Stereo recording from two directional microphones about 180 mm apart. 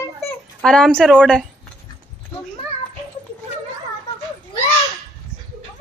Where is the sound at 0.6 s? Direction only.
5° left (ahead or behind).